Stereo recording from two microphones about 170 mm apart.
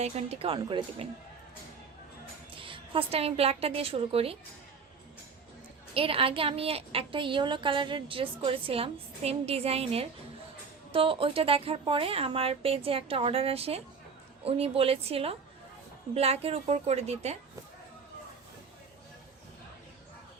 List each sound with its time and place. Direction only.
0.0 s a woman's voice: 40° right (ahead or behind)
2.6 s a woman's voice: 30° right (ahead or behind)
5.9 s a woman's voice: 35° right (ahead or behind)